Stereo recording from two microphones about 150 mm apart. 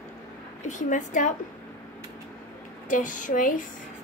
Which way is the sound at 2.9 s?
60° left (ahead or behind).